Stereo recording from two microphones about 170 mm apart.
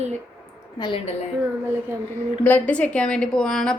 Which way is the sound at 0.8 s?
30° left (ahead or behind).